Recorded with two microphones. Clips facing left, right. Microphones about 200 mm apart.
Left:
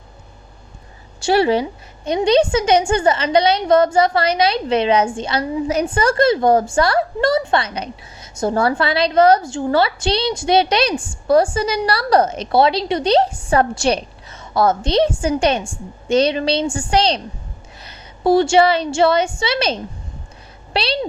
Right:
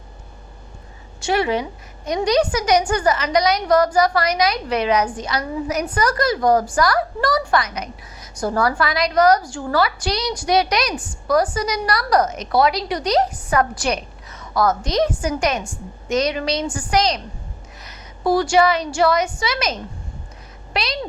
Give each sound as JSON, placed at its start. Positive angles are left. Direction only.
{"t": 1.2, "sound": "a woman's voice", "side_deg": 30}